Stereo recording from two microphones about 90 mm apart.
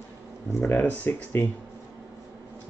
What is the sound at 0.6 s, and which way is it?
Speech, 20° left (ahead or behind).